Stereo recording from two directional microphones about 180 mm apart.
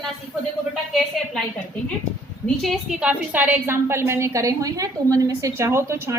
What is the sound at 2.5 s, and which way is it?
A woman's voice, centre (ahead or behind).